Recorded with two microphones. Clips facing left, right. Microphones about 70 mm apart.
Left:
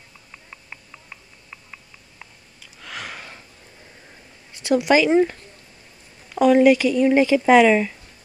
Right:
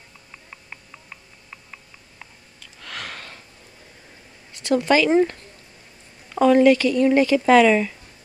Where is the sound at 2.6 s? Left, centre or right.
Centre.